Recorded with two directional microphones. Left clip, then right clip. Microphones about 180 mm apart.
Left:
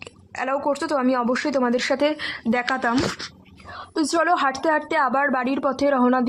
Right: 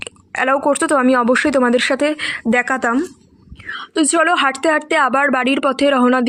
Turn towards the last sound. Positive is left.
turn(degrees=-20)  # may be behind; listen again after turning